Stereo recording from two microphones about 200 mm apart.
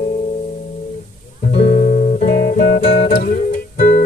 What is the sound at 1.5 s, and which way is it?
Music, 35° left (ahead or behind).